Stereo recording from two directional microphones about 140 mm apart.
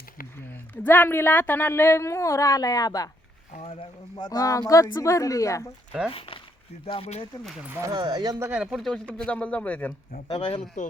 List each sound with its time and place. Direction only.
0.4 s speech: 15° left (ahead or behind)
3.5 s a sound: 50° left (ahead or behind)
4.2 s speech: 25° left (ahead or behind)
6.1 s speech: 40° left (ahead or behind)
7.7 s speech: 25° right (ahead or behind)
8.4 s speech: 10° right (ahead or behind); by 9.9 s 10° left (ahead or behind)
10.2 s speech: 35° left (ahead or behind)